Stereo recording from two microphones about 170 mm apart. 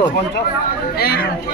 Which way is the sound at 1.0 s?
65° left (ahead or behind).